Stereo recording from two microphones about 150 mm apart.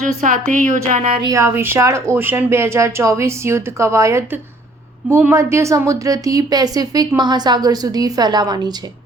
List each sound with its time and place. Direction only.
0.0 s speech: 60° right (ahead or behind)
1.2 s a woman's voice: 20° right (ahead or behind)